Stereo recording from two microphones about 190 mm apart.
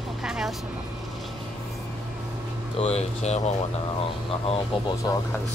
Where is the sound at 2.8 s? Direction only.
35° left (ahead or behind).